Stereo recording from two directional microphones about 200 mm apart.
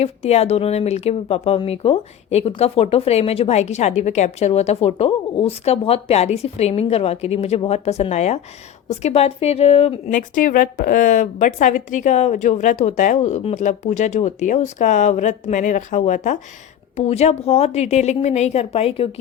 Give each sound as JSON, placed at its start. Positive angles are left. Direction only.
{"t": 0.0, "sound": "speech", "side_deg": 30}